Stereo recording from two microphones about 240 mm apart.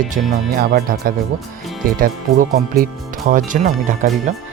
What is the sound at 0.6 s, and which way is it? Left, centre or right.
Speech, right.